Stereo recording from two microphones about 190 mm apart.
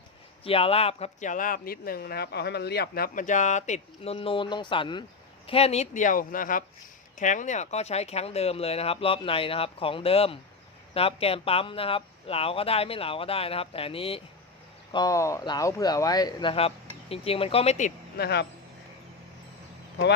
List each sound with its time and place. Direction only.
0.4 s speech: 30° left (ahead or behind)
14.9 s speech: 20° left (ahead or behind); by 17.9 s 35° left (ahead or behind)
18.2 s speech: 60° left (ahead or behind)